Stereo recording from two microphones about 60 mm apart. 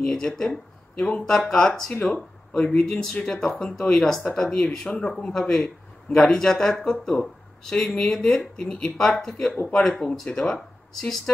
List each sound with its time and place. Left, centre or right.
0.0 s speech: centre
9.5 s speech: left
9.8 s speech: centre